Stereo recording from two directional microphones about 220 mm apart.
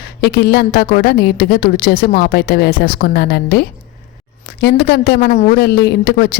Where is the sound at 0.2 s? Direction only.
45° left (ahead or behind).